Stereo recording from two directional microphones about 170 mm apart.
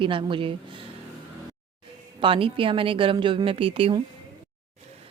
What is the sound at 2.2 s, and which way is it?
Speech, 30° right (ahead or behind).